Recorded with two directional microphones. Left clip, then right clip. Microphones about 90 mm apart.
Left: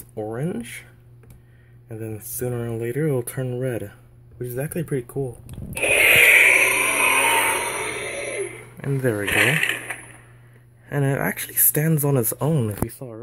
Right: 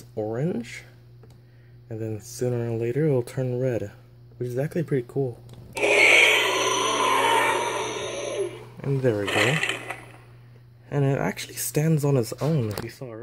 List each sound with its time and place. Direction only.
0.1 s speech: 20° right (ahead or behind)
0.4 s speech: 30° right (ahead or behind)
1.9 s speech: 35° right (ahead or behind); by 3.9 s 10° right (ahead or behind)
4.4 s speech: 30° right (ahead or behind)
5.8 s a sound: 40° right (ahead or behind)
6.2 s a sound: 20° right (ahead or behind)
6.8 s a sound: 30° right (ahead or behind)
8.8 s speech: 5° right (ahead or behind)
9.2 s speech: 25° right (ahead or behind)
9.5 s a sound: 35° right (ahead or behind)
10.9 s speech: 10° right (ahead or behind)
12.4 s speech: 30° left (ahead or behind)